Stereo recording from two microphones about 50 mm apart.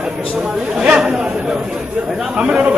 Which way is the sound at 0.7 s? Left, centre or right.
Centre.